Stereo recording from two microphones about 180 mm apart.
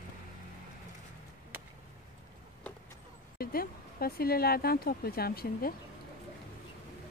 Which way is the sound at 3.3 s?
55° left (ahead or behind).